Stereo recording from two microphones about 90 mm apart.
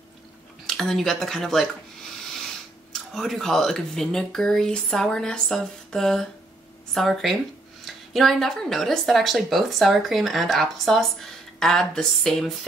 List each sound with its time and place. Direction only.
0.7 s speech: 5° left (ahead or behind)